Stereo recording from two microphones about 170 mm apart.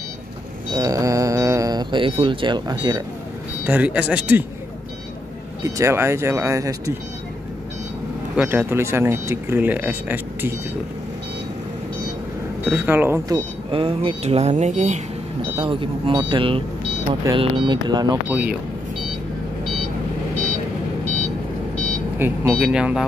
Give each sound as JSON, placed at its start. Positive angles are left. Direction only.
{"t": 0.7, "sound": "a sound", "side_deg": -20}
{"t": 3.6, "sound": "speech", "side_deg": -10}
{"t": 5.6, "sound": "speech", "side_deg": -15}
{"t": 8.4, "sound": "speech", "side_deg": -10}
{"t": 12.6, "sound": "speech", "side_deg": -10}
{"t": 13.7, "sound": "speech", "side_deg": -30}
{"t": 15.5, "sound": "speech", "side_deg": -30}
{"t": 18.3, "sound": "speech", "side_deg": -5}
{"t": 22.2, "sound": "speech", "side_deg": -10}